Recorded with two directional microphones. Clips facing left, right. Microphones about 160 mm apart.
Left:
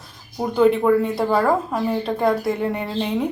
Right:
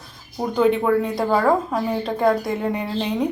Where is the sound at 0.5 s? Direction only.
Centre (ahead or behind).